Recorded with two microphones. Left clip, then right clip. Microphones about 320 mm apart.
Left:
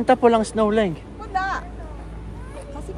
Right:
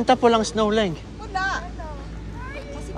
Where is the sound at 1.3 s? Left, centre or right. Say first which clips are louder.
Left 1 dB; left.